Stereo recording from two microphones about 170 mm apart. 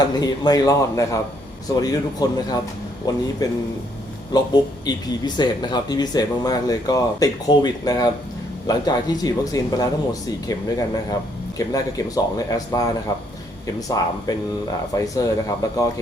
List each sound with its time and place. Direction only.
0.2 s speech: 20° left (ahead or behind)